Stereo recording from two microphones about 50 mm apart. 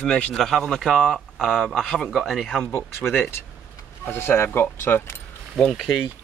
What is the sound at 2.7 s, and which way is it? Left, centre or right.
Speech, left.